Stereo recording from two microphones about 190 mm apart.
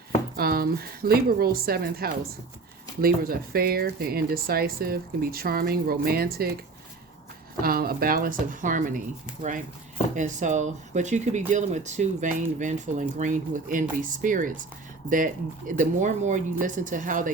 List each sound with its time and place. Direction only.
0.3 s speech: 55° right (ahead or behind)
7.6 s speech: 50° right (ahead or behind)
10.2 s speech: 40° right (ahead or behind)